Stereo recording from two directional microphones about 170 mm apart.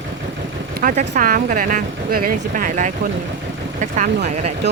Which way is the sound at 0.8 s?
50° right (ahead or behind).